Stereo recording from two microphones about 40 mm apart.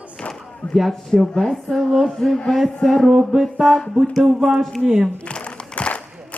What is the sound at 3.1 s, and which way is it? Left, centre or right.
Music, centre.